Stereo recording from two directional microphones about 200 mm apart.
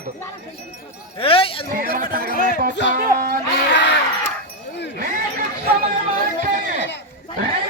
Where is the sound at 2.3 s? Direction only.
45° left (ahead or behind).